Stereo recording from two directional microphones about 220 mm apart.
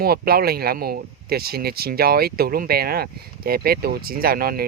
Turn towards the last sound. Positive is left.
turn(degrees=-40)  # may be behind; listen again after turning